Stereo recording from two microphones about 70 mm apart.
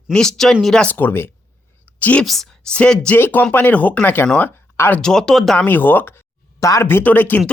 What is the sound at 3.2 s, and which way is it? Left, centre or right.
Speech, left.